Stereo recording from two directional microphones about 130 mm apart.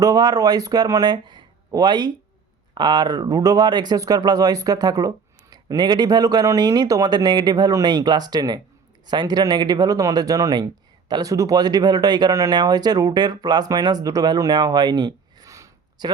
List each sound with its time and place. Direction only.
0.0 s speech: 30° right (ahead or behind)